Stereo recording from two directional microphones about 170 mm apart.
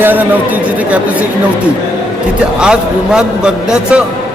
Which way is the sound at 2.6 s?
5° right (ahead or behind).